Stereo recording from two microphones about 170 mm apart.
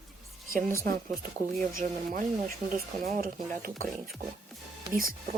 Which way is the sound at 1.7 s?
50° right (ahead or behind).